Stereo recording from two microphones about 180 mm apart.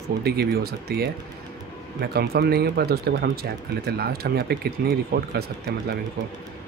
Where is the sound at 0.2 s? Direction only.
60° right (ahead or behind).